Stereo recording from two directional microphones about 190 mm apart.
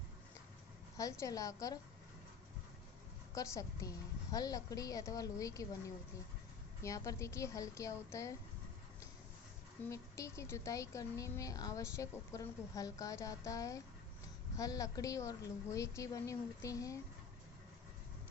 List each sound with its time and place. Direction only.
0.9 s speech: 15° left (ahead or behind)
3.3 s speech: 15° left (ahead or behind)
6.8 s speech: 15° left (ahead or behind)
9.9 s speech: 15° left (ahead or behind)